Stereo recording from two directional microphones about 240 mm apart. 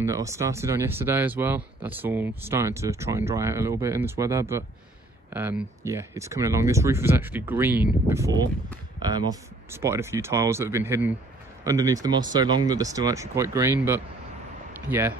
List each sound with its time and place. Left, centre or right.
0.0 s speech: centre